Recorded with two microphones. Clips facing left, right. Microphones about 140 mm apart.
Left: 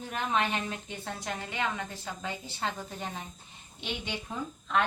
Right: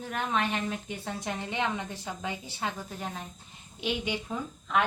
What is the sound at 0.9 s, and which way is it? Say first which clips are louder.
A woman's voice: right 2 dB; 15° right (ahead or behind).